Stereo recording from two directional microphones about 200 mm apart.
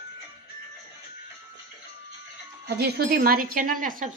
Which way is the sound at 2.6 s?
55° right (ahead or behind).